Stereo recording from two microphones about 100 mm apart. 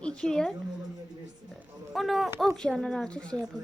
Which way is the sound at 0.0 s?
10° left (ahead or behind).